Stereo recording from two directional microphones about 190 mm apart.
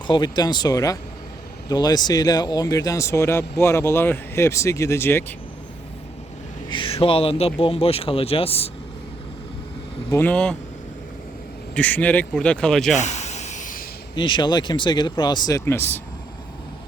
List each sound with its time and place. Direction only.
0.1 s speech: 20° left (ahead or behind)
6.7 s speech: 25° left (ahead or behind)
10.1 s speech: 10° left (ahead or behind)
11.7 s speech: 5° left (ahead or behind)
12.9 s a sound: 40° left (ahead or behind)
14.2 s speech: 25° left (ahead or behind)